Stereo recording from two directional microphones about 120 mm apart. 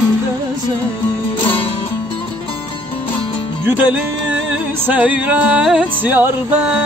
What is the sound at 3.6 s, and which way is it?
Music, 10° right (ahead or behind).